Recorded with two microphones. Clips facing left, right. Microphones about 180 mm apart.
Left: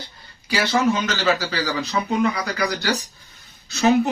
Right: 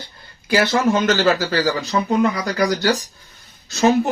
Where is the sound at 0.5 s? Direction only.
50° right (ahead or behind).